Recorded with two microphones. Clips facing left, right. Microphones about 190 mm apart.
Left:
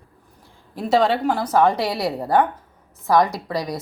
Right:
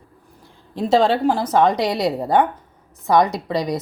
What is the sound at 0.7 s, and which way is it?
A woman's voice, 25° right (ahead or behind).